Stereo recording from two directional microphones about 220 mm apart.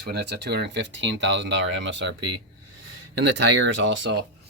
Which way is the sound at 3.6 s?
55° right (ahead or behind).